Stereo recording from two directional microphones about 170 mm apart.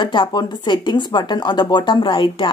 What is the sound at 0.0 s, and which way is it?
A woman's voice, 30° left (ahead or behind).